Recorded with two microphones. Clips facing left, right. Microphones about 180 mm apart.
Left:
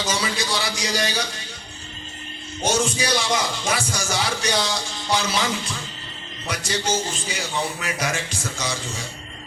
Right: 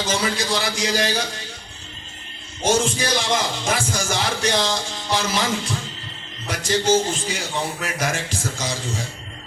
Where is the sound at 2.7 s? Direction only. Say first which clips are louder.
Right 2 dB; 50° right (ahead or behind).